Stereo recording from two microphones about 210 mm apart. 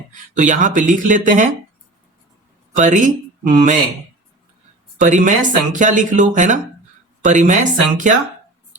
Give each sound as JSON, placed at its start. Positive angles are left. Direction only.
{"t": 0.1, "sound": "speech", "side_deg": -35}
{"t": 2.7, "sound": "speech", "side_deg": -35}
{"t": 4.9, "sound": "speech", "side_deg": -35}